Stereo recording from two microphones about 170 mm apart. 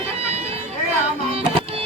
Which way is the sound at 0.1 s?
35° right (ahead or behind).